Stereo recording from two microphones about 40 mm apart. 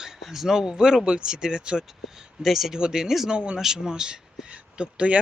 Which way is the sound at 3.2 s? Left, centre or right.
Right.